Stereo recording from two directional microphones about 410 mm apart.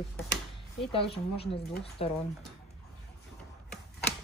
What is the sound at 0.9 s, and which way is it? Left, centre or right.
Speech, centre.